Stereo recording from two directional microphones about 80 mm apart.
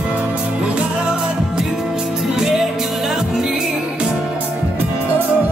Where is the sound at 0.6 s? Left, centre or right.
Centre.